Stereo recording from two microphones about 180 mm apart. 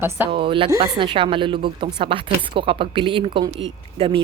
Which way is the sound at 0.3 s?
30° right (ahead or behind).